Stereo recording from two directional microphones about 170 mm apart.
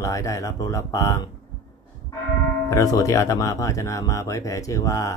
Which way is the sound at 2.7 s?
20° left (ahead or behind).